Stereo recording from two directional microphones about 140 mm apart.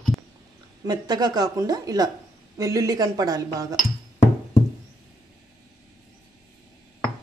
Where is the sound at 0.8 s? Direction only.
30° right (ahead or behind).